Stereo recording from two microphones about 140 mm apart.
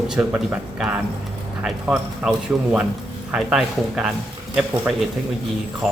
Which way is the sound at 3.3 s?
5° right (ahead or behind).